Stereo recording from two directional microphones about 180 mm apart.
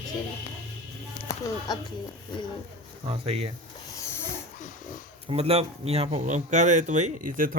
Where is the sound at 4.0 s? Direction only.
15° left (ahead or behind).